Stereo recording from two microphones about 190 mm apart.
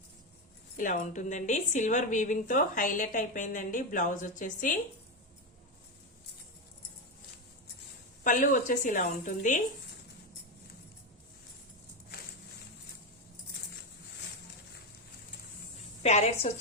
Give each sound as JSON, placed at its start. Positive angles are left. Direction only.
{"t": 0.8, "sound": "a woman's voice", "side_deg": 45}
{"t": 8.2, "sound": "a woman's voice", "side_deg": 45}
{"t": 16.0, "sound": "a woman's voice", "side_deg": 35}